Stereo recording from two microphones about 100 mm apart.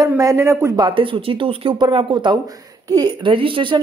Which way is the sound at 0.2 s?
35° right (ahead or behind).